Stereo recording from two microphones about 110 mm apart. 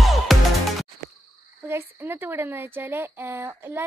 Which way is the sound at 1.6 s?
20° right (ahead or behind).